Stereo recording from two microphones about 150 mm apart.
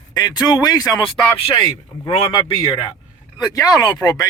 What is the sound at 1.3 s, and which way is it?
Speech, 40° left (ahead or behind).